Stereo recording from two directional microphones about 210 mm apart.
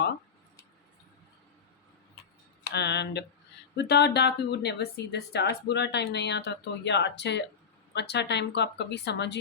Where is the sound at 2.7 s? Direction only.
55° left (ahead or behind).